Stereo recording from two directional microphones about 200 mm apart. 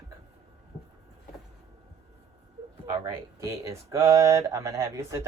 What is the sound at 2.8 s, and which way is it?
Speech, 15° right (ahead or behind).